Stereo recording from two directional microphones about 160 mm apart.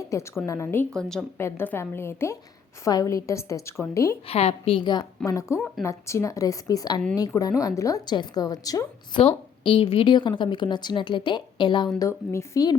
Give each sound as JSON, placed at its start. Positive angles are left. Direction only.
{"t": 0.1, "sound": "a woman's voice", "side_deg": 20}
{"t": 0.9, "sound": "a woman's voice", "side_deg": 5}
{"t": 1.4, "sound": "a woman's voice", "side_deg": 15}
{"t": 4.3, "sound": "a woman's voice", "side_deg": 40}
{"t": 5.5, "sound": "a woman's voice", "side_deg": 0}
{"t": 5.8, "sound": "a woman's voice", "side_deg": 20}
{"t": 9.2, "sound": "a woman's voice", "side_deg": 35}
{"t": 11.9, "sound": "a woman's voice", "side_deg": 20}